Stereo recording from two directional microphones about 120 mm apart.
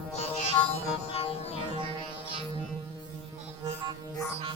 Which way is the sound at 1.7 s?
45° right (ahead or behind).